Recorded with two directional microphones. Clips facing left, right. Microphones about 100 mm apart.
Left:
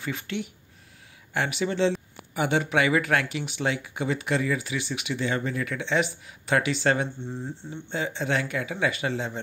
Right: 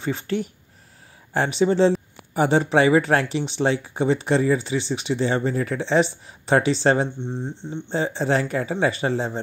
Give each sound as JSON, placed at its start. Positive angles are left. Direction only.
{"t": 0.0, "sound": "speech", "side_deg": -30}
{"t": 7.9, "sound": "speech", "side_deg": -35}